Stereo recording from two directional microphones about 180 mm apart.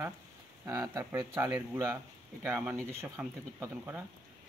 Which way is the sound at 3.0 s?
15° right (ahead or behind).